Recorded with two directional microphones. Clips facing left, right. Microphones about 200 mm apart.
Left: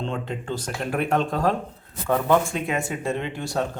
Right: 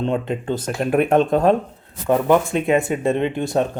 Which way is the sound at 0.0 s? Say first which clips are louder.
Right 7 dB; 20° right (ahead or behind).